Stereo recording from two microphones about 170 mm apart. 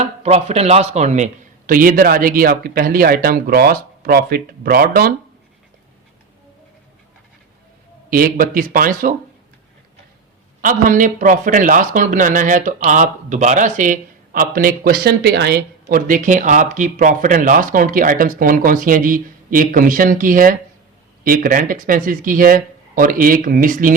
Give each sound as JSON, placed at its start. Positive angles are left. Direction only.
{"t": 0.0, "sound": "a man's voice", "side_deg": -40}
{"t": 8.1, "sound": "a man's voice", "side_deg": -55}
{"t": 10.6, "sound": "a man's voice", "side_deg": -50}